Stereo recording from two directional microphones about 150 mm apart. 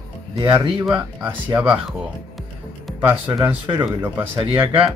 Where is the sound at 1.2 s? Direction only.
10° right (ahead or behind).